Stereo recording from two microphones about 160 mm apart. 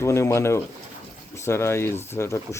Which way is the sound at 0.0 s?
15° left (ahead or behind).